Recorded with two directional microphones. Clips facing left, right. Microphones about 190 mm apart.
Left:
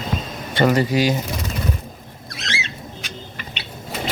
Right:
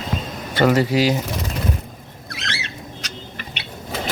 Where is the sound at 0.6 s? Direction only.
5° right (ahead or behind).